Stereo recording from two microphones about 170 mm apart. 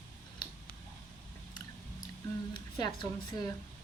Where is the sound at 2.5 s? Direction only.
25° left (ahead or behind).